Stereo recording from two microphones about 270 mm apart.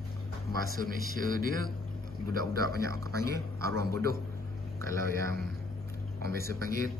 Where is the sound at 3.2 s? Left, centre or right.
Centre.